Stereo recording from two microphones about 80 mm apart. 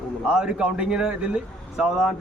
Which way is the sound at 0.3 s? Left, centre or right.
Centre.